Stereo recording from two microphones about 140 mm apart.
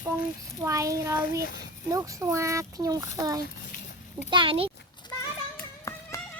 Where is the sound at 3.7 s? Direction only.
75° left (ahead or behind).